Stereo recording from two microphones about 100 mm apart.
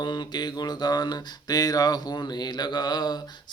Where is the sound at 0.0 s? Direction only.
50° left (ahead or behind).